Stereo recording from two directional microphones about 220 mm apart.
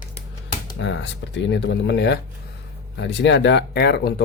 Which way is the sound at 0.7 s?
55° left (ahead or behind).